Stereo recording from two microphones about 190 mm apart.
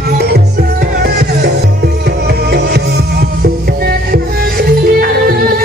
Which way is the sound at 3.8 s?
55° right (ahead or behind).